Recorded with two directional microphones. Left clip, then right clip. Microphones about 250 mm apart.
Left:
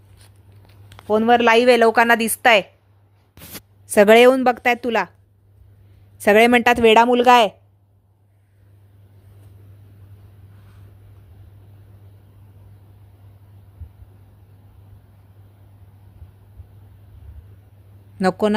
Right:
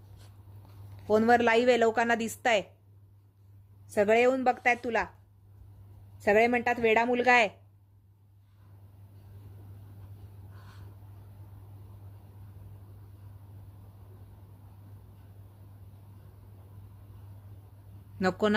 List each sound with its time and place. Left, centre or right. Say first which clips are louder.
1.0 s a woman's voice: left 8 dB; centre
3.8 s speech: left 13 dB; left
6.1 s speech: left 11 dB; left
18.2 s speech: left 9 dB; left